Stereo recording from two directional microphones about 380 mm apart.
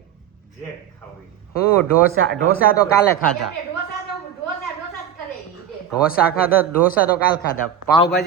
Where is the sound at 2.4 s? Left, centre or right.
Left.